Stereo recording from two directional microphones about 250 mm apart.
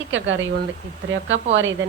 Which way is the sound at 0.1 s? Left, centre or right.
Right.